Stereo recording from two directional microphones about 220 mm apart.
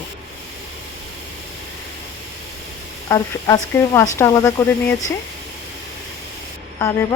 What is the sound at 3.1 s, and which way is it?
Speech, 15° left (ahead or behind).